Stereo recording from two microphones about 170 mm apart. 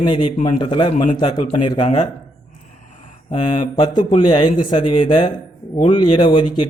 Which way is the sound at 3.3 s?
25° left (ahead or behind).